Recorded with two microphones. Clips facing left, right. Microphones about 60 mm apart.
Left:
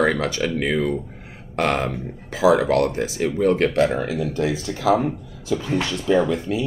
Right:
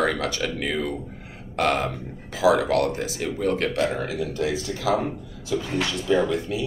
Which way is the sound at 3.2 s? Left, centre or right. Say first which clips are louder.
Left 6 dB; left.